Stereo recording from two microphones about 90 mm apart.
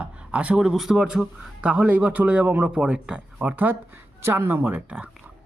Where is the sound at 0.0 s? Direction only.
15° right (ahead or behind).